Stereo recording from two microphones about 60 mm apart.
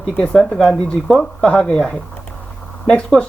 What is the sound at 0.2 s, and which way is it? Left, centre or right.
Speech, centre.